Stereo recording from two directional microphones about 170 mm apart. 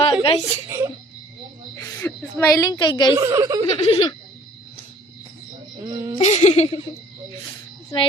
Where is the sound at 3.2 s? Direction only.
20° right (ahead or behind).